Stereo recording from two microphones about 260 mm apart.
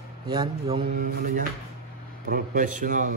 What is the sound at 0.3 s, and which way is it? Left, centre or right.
Speech, centre.